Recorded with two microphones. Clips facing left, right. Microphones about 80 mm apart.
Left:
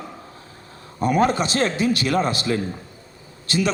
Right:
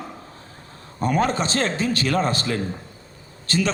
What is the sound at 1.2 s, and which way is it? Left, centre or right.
A man's voice, right.